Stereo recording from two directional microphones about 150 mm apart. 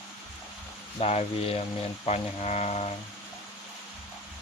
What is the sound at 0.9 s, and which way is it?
Speech, 45° left (ahead or behind).